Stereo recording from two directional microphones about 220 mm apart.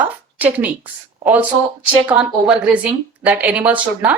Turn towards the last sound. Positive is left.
turn(degrees=-5)  # may be behind; listen again after turning